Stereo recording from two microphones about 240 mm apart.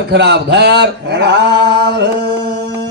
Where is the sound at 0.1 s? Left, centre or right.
Right.